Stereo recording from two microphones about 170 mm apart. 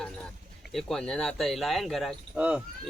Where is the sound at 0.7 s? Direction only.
Centre (ahead or behind).